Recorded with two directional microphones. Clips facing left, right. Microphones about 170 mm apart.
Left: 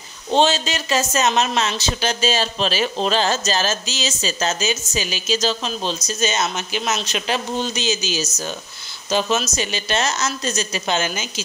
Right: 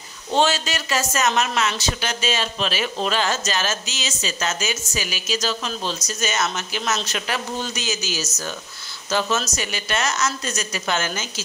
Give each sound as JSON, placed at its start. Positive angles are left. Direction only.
{"t": 0.3, "sound": "speech", "side_deg": 25}